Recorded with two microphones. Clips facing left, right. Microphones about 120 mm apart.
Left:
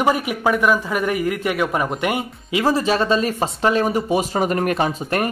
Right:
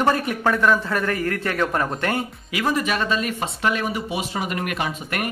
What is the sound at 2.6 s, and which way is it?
A man's voice, 30° left (ahead or behind).